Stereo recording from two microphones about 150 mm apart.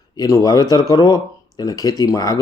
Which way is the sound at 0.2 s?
25° left (ahead or behind).